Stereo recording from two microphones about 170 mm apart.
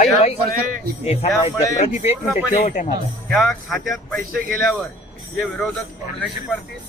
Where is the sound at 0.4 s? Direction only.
60° right (ahead or behind).